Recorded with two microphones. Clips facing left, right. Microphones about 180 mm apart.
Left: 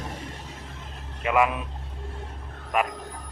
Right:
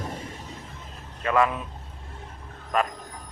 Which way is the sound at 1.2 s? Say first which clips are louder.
Even; 15° left (ahead or behind).